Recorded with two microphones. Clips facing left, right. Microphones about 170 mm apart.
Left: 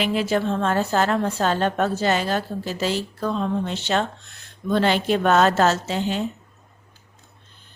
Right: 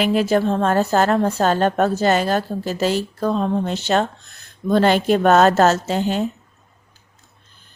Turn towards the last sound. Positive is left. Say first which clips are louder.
# right 4 dB
turn(degrees=-45)  # may be behind; listen again after turning